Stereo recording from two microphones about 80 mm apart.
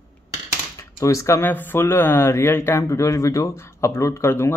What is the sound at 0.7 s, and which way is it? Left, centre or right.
Speech, left.